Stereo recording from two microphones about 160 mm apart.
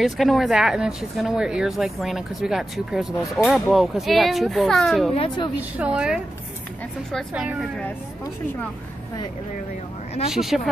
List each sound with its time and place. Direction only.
0.0 s speech: centre (ahead or behind)
5.1 s speech: 35° left (ahead or behind)
5.6 s speech: 10° right (ahead or behind)
10.3 s speech: centre (ahead or behind)